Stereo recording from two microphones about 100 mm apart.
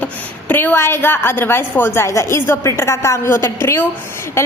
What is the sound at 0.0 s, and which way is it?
A woman's voice, 20° left (ahead or behind).